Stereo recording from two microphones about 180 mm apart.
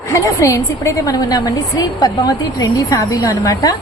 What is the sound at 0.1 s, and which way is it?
A woman's voice, 15° left (ahead or behind).